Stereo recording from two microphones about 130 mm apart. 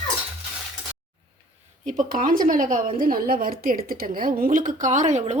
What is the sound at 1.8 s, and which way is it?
A woman's voice, 90° right.